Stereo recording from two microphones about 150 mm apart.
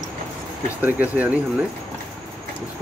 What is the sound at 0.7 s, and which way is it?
Speech, 10° right (ahead or behind).